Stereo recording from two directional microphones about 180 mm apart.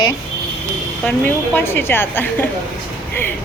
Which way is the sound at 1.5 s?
10° left (ahead or behind).